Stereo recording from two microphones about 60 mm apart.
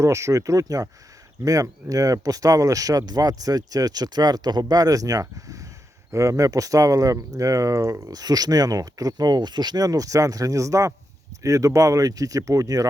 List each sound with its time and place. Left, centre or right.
0.0 s speech: right